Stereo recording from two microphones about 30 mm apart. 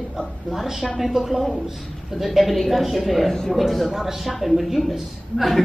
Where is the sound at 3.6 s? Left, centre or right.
Centre.